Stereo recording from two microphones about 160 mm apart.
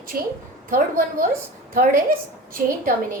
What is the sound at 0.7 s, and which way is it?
Speech, 60° right (ahead or behind).